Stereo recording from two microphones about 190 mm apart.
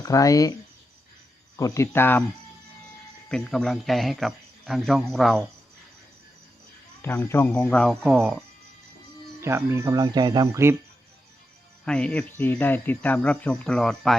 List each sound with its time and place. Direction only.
0.0 s speech: 20° left (ahead or behind)
1.5 s speech: 15° left (ahead or behind)
3.2 s a man's voice: 5° left (ahead or behind)
7.0 s speech: 10° left (ahead or behind)
9.4 s speech: 15° right (ahead or behind)
11.9 s speech: 5° left (ahead or behind)